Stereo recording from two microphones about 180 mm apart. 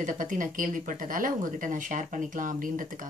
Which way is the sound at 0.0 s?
45° right (ahead or behind).